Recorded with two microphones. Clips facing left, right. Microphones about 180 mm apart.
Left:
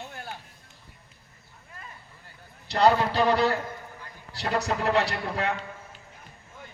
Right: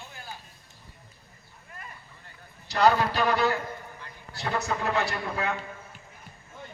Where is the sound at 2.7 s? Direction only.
30° left (ahead or behind).